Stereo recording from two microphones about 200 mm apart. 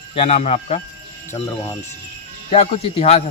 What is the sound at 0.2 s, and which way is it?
Speech, 35° left (ahead or behind).